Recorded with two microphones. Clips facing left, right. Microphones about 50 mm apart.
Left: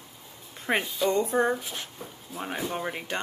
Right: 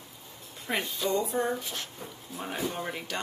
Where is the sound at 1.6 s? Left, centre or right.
Centre.